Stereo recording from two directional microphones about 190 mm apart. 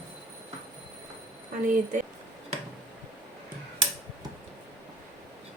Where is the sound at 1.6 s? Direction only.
40° right (ahead or behind).